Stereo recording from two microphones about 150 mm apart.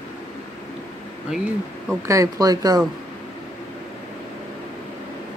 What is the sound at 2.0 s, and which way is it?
Speech, 20° right (ahead or behind).